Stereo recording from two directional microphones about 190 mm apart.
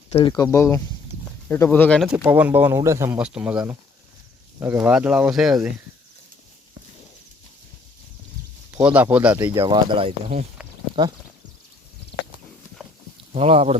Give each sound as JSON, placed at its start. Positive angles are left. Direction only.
{"t": 0.1, "sound": "speech", "side_deg": 25}
{"t": 2.2, "sound": "speech", "side_deg": -10}
{"t": 8.7, "sound": "speech", "side_deg": -5}
{"t": 9.4, "sound": "speech", "side_deg": -20}
{"t": 13.3, "sound": "speech", "side_deg": -30}